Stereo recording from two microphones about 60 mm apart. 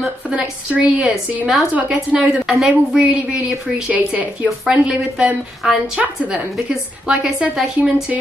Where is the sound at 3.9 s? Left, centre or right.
Right.